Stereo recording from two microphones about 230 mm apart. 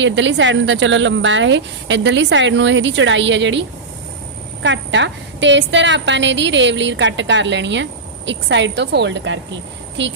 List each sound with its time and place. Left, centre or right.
0.0 s a woman's voice: right